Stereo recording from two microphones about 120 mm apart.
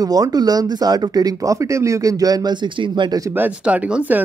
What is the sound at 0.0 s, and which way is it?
Speech, 30° right (ahead or behind).